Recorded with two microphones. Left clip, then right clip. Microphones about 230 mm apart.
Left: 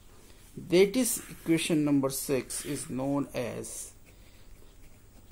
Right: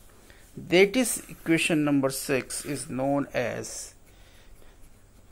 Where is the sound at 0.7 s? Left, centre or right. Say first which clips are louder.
Right 3 dB; centre.